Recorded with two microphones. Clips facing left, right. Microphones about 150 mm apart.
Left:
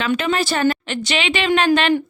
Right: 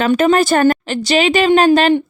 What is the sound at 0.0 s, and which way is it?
Speech, 45° right (ahead or behind).